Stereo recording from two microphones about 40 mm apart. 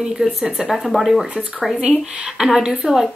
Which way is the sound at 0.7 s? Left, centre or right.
Centre.